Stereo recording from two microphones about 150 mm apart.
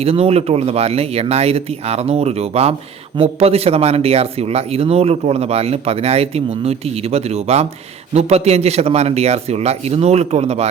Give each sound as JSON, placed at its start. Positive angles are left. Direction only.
{"t": 0.0, "sound": "speech", "side_deg": -40}